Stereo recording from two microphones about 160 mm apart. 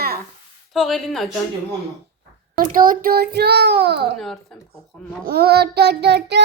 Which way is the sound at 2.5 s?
60° right (ahead or behind).